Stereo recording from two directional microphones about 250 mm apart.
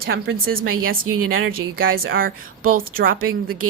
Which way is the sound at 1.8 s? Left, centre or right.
Right.